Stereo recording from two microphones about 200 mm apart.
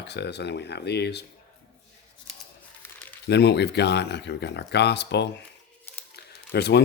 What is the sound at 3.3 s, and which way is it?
Speech, 55° left (ahead or behind).